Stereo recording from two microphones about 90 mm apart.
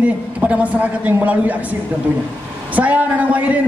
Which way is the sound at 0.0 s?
15° right (ahead or behind).